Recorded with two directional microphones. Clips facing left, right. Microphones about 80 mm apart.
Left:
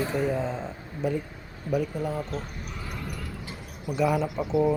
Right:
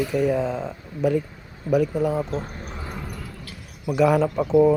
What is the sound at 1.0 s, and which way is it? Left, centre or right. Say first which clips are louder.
Speech: right 7 dB; right.